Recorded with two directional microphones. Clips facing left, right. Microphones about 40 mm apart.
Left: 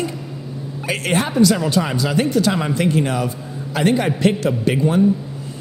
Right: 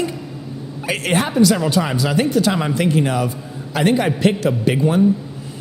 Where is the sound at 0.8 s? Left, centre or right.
Right.